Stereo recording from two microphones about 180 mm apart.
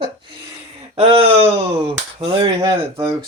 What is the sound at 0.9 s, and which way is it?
Speech, 30° right (ahead or behind).